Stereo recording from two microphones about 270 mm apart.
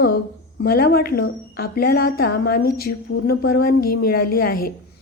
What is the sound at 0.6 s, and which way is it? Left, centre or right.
A woman's voice, left.